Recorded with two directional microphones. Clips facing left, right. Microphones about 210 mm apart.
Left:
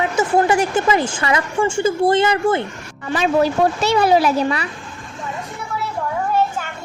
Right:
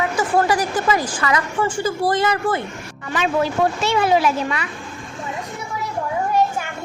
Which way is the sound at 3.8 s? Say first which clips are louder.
Left 3 dB; 40° left (ahead or behind).